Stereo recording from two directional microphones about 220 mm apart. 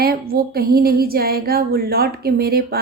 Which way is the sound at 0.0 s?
45° right (ahead or behind).